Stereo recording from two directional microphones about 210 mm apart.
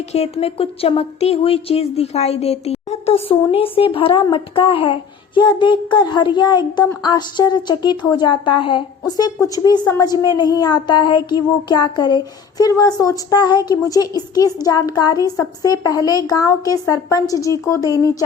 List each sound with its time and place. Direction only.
0.1 s speech: 30° left (ahead or behind)